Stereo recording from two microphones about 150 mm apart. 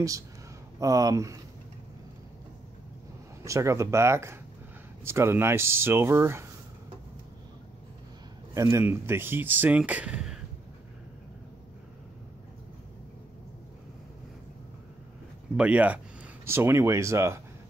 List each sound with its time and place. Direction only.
0.7 s speech: 25° right (ahead or behind)
3.4 s speech: 20° right (ahead or behind)
8.5 s speech: 20° right (ahead or behind)
15.5 s speech: 10° right (ahead or behind)